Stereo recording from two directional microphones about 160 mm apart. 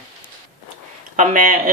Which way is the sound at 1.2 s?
55° right (ahead or behind).